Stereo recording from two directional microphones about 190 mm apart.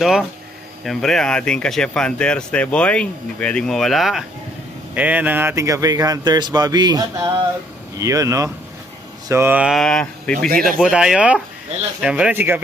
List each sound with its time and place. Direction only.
0.0 s speech: centre (ahead or behind)